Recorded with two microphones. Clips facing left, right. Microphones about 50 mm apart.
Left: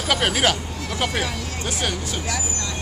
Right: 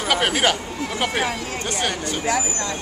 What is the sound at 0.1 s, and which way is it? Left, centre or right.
Speech, centre.